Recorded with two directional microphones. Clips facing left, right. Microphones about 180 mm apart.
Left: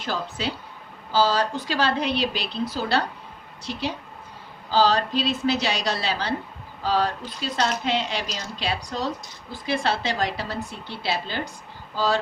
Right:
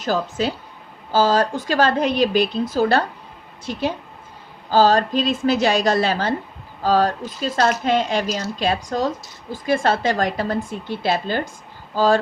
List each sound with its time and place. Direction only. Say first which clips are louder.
0.0 s a woman's voice: right 7 dB; 45° right (ahead or behind)
4.7 s a woman's voice: right 5 dB; 45° right (ahead or behind)